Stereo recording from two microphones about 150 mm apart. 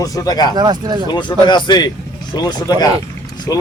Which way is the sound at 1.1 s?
30° left (ahead or behind).